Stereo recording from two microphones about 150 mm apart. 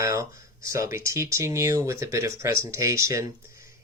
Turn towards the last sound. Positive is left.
turn(degrees=-20)  # may be behind; listen again after turning